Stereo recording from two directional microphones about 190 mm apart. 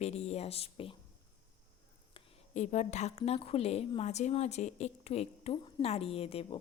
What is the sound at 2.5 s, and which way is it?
A woman's voice, 40° left (ahead or behind).